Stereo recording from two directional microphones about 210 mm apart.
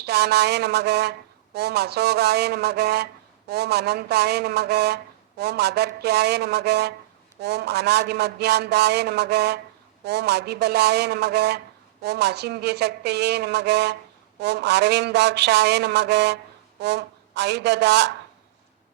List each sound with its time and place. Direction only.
0.0 s a man's voice: 50° right (ahead or behind)